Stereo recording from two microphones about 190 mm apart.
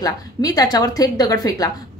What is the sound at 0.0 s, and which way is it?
A woman's voice, 20° left (ahead or behind).